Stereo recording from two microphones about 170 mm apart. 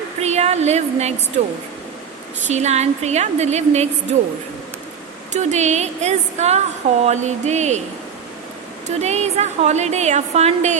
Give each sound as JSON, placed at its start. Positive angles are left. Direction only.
{"t": 0.2, "sound": "a sound", "side_deg": -40}
{"t": 1.4, "sound": "a woman's voice", "side_deg": -40}
{"t": 5.3, "sound": "a woman's voice", "side_deg": -45}
{"t": 9.0, "sound": "a woman's voice", "side_deg": -40}